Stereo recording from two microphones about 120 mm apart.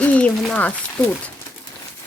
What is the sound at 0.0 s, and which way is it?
Speech, 10° left (ahead or behind).